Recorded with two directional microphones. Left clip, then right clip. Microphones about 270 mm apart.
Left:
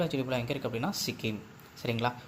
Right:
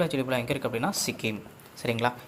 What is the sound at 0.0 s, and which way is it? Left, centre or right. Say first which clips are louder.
Speech: right 4 dB; centre.